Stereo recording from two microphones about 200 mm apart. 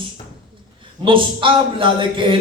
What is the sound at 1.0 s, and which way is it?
A man's voice, 25° right (ahead or behind).